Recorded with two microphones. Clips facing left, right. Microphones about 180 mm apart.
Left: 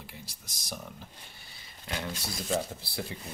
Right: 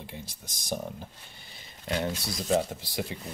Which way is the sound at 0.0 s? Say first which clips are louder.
Right 5 dB; 20° right (ahead or behind).